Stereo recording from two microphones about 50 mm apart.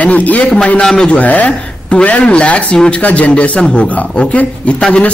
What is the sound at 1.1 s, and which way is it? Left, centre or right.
A man's voice, left.